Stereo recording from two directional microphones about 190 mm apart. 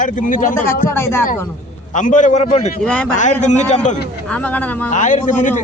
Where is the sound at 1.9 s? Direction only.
40° left (ahead or behind).